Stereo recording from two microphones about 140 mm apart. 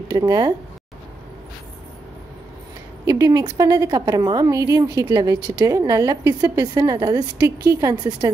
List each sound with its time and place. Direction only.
0.1 s a woman's voice: 30° right (ahead or behind)
3.1 s a woman's voice: 25° right (ahead or behind)